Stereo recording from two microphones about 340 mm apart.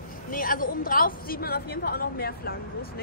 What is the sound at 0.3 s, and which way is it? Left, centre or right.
A woman's voice, left.